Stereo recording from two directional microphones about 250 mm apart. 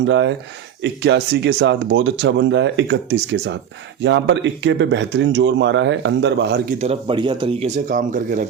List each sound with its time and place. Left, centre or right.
0.0 s speech: right
6.7 s speech: right